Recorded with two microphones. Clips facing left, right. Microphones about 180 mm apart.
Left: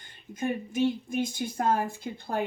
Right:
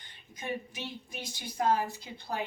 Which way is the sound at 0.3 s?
50° left (ahead or behind).